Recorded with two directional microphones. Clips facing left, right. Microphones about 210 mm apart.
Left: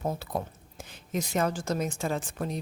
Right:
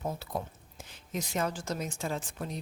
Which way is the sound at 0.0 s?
50° left (ahead or behind).